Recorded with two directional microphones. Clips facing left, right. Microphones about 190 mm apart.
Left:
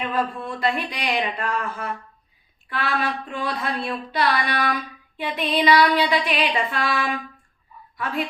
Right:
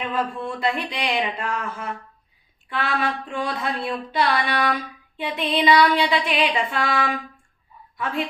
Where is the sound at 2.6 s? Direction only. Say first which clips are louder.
Even; 20° right (ahead or behind).